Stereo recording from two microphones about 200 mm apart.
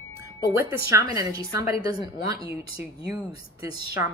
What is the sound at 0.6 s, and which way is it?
A woman's voice, 15° right (ahead or behind).